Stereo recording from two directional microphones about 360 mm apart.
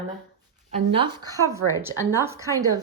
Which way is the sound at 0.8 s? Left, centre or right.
Centre.